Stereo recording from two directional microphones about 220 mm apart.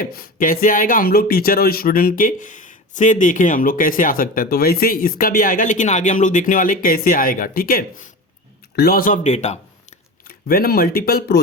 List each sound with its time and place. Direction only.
0.0 s speech: 40° left (ahead or behind)
10.2 s speech: 45° left (ahead or behind)